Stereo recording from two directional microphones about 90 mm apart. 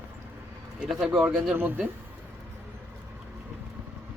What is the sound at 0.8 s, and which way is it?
Speech, 5° right (ahead or behind).